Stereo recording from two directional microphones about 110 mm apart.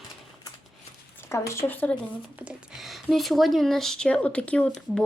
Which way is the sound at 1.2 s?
25° left (ahead or behind).